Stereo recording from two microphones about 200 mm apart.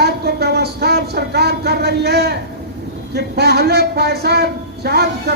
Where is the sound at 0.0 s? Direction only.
55° right (ahead or behind).